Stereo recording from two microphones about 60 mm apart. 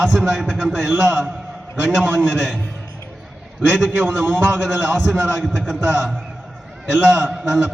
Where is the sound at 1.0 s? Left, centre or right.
Right.